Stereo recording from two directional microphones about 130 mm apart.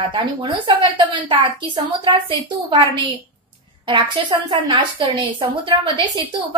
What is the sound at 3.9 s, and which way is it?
A woman's voice, 35° right (ahead or behind).